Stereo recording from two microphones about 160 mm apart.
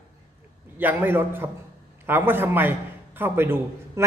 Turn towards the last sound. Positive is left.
turn(degrees=-15)  # may be behind; listen again after turning